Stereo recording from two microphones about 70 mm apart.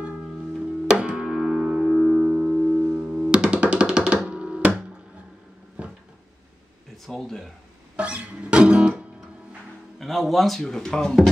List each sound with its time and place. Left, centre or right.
0.8 s music: centre
5.8 s cupboard open or close: centre
7.1 s speech: centre
7.9 s music: centre
9.9 s speech: centre